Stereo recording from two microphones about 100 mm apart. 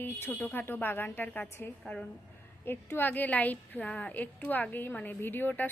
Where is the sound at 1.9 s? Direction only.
10° left (ahead or behind).